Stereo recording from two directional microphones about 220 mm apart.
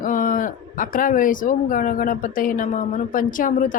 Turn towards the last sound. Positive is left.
turn(degrees=35)  # may be behind; listen again after turning